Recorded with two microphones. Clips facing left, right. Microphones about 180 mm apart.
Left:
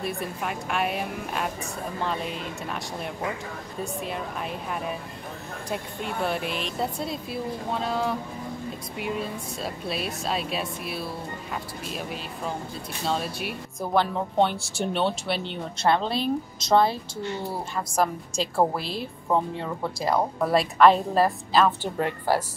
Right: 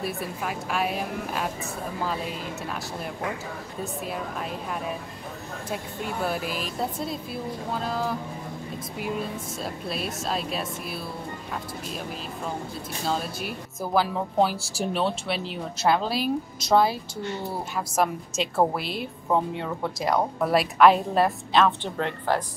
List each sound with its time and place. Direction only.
0.0 s a woman's voice: centre (ahead or behind)
13.0 s a woman's voice: centre (ahead or behind)
14.6 s speech: 35° right (ahead or behind)
14.9 s a woman's voice: centre (ahead or behind)